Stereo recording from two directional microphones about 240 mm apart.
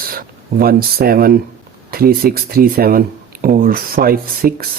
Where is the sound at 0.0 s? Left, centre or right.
Right.